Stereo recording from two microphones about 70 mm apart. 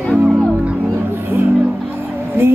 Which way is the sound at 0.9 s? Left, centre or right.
Right.